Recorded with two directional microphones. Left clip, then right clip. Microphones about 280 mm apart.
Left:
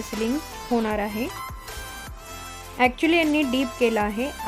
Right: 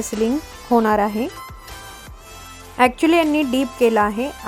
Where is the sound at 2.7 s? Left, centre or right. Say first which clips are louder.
Right 5 dB; centre.